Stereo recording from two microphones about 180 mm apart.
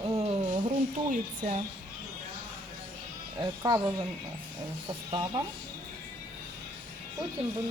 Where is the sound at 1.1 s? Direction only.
40° right (ahead or behind).